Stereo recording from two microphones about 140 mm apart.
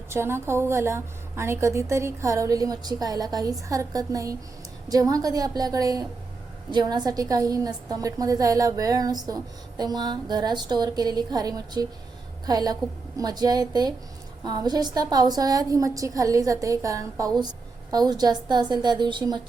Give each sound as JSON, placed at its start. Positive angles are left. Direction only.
{"t": 0.1, "sound": "a woman's voice", "side_deg": -20}